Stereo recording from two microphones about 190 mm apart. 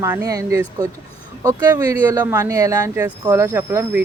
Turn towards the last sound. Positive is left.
turn(degrees=-10)  # may be behind; listen again after turning